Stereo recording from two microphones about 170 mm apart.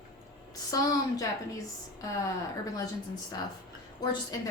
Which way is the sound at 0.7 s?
20° left (ahead or behind).